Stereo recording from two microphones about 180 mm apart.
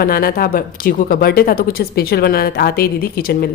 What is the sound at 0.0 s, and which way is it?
A woman's voice, 55° left (ahead or behind).